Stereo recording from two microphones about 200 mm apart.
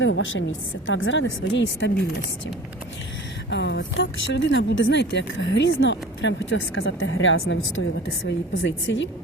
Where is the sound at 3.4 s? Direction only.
65° left (ahead or behind).